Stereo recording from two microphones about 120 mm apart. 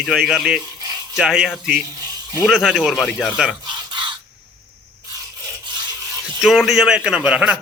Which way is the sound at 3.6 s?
40° right (ahead or behind).